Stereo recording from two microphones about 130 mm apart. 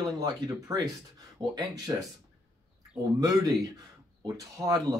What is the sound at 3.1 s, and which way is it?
A man's voice, 25° right (ahead or behind).